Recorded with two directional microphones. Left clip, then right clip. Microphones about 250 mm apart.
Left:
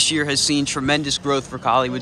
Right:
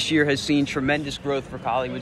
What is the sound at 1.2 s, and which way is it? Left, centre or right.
Speech, centre.